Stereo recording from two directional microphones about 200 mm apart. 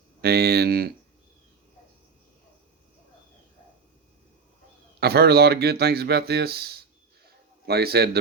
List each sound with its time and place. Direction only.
0.2 s speech: 55° right (ahead or behind)
4.9 s speech: 55° right (ahead or behind)
7.3 s a sound: 50° right (ahead or behind)